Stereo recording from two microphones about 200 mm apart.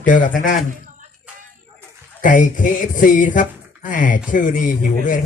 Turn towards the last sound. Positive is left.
turn(degrees=40)  # may be behind; listen again after turning